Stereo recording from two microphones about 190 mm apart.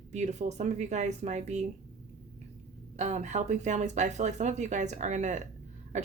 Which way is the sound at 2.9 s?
40° right (ahead or behind).